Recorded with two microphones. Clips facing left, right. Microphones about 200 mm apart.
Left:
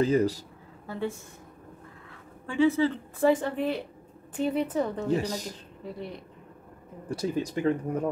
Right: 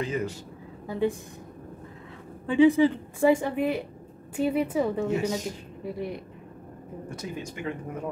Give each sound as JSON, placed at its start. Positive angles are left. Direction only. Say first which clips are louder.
{"t": 0.0, "sound": "speech", "louder": "left 6 dB", "side_deg": 35}
{"t": 0.8, "sound": "a woman's voice", "louder": "right 6 dB", "side_deg": -15}
{"t": 2.4, "sound": "a woman's voice", "louder": "right 4 dB", "side_deg": -15}
{"t": 5.0, "sound": "speech", "louder": "right 1 dB", "side_deg": 35}
{"t": 5.9, "sound": "a woman's voice", "louder": "right 6 dB", "side_deg": -10}
{"t": 7.1, "sound": "speech", "louder": "left 8 dB", "side_deg": 35}